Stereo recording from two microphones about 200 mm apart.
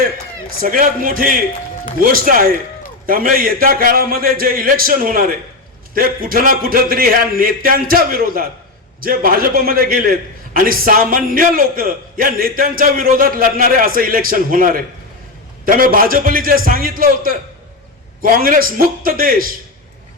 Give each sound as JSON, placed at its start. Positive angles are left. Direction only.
{"t": 0.6, "sound": "a man's voice", "side_deg": -45}